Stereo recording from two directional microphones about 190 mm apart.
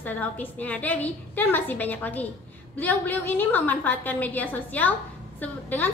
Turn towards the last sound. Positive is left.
turn(degrees=10)  # may be behind; listen again after turning